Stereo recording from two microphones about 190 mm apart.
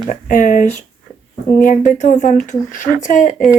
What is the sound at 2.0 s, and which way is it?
Speech, 40° left (ahead or behind).